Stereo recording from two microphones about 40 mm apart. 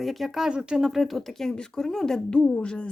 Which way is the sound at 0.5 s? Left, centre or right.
Right.